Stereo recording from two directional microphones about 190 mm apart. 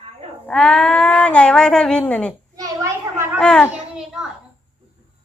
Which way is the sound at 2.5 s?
15° right (ahead or behind).